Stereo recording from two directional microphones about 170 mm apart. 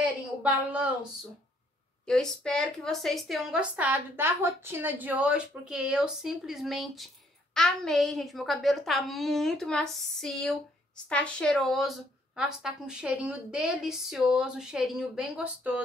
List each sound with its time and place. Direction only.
0.4 s a woman's voice: 10° right (ahead or behind)
2.0 s a woman's voice: 5° left (ahead or behind)